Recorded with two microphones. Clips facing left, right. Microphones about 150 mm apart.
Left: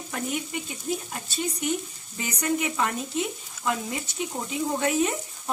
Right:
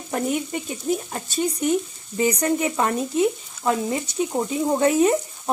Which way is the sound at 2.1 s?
40° right (ahead or behind).